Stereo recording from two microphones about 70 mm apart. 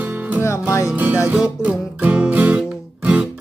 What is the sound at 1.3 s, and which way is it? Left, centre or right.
Music, centre.